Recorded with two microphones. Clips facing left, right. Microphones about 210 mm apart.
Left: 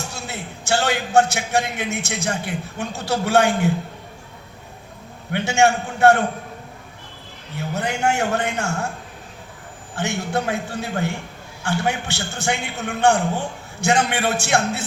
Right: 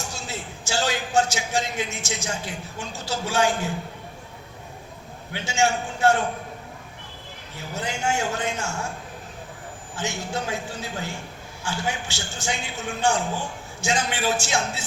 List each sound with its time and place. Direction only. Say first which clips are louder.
0.1 s a man's voice: left 2 dB; 60° left (ahead or behind)
5.3 s a man's voice: left 6 dB; 60° left (ahead or behind)
7.5 s a man's voice: left 6 dB; 60° left (ahead or behind)
9.9 s a man's voice: left 6 dB; 60° left (ahead or behind)